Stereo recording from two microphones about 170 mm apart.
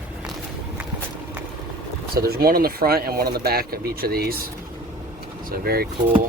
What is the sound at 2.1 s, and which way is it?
Speech, 65° right (ahead or behind).